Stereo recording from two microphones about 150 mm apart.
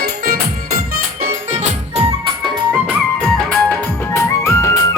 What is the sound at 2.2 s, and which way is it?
Music, 30° right (ahead or behind).